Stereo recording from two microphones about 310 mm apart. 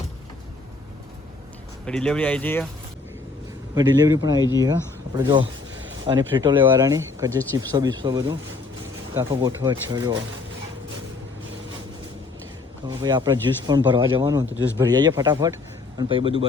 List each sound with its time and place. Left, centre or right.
1.9 s speech: centre
3.8 s speech: centre
4.4 s speech: centre
5.1 s speech: centre
12.9 s speech: centre